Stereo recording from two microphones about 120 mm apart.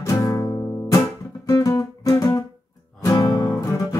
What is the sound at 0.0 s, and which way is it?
Music, 25° left (ahead or behind).